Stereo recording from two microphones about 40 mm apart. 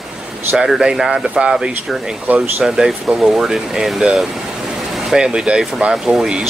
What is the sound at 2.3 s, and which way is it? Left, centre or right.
Speech, right.